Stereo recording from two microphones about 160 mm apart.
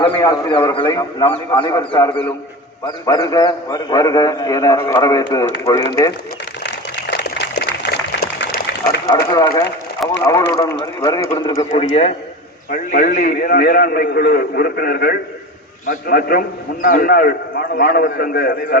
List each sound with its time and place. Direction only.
0.0 s a man's voice: 20° left (ahead or behind)
6.6 s a sound: 90° left
9.0 s a man's voice: 30° left (ahead or behind)
11.9 s a man's voice: 45° left (ahead or behind)
12.7 s a man's voice: 60° left (ahead or behind)